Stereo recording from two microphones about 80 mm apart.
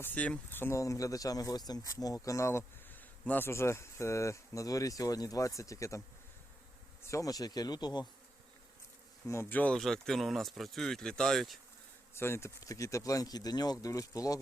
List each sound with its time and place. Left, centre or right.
0.0 s speech: centre
0.8 s speech: left
2.9 s insect: left
3.5 s speech: left
7.1 s speech: left
9.2 s speech: left
9.5 s speech: left
9.7 s speech: centre
12.1 s speech: left
12.5 s speech: left